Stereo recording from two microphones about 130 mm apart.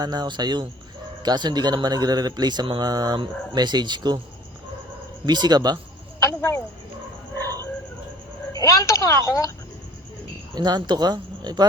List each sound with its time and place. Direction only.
0.0 s speech: 30° right (ahead or behind)
5.2 s speech: 30° right (ahead or behind)
6.1 s a sound: 20° left (ahead or behind)
8.5 s a woman's voice: 25° left (ahead or behind)
10.5 s speech: 30° right (ahead or behind)